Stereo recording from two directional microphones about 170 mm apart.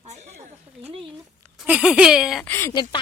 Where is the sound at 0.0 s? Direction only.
45° right (ahead or behind).